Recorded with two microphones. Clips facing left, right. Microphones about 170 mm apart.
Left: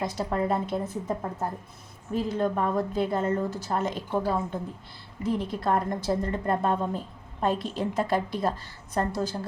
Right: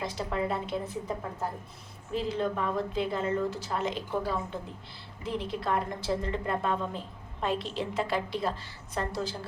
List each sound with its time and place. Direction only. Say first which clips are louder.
0.0 s a woman's voice: left 4 dB; 45° left (ahead or behind)
2.1 s a woman's voice: left 3 dB; 45° left (ahead or behind)